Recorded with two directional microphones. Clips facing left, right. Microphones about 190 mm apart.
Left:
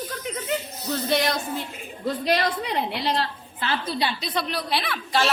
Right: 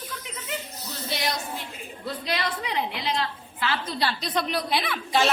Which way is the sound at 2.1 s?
45° left (ahead or behind).